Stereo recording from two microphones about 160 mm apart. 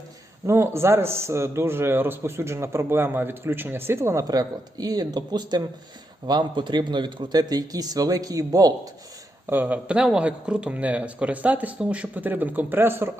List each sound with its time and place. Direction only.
0.4 s speech: 15° right (ahead or behind)
9.5 s speech: 10° right (ahead or behind)